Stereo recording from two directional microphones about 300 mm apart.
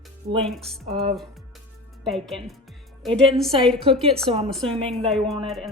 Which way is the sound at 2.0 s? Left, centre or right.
Centre.